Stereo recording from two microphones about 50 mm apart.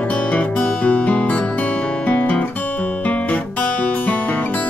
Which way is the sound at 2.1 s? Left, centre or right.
Left.